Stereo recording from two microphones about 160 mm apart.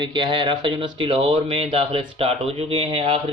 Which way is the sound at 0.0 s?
30° right (ahead or behind).